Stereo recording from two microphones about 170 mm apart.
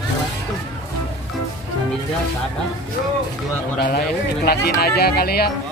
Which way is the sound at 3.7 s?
65° left (ahead or behind).